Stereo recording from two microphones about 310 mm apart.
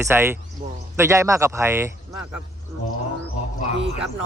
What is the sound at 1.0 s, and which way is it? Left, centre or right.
Speech, centre.